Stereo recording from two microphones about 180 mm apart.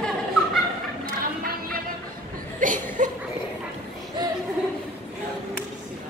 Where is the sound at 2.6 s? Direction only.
45° right (ahead or behind).